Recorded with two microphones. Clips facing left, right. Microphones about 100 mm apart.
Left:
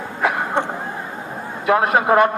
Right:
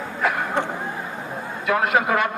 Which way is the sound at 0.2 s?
20° left (ahead or behind).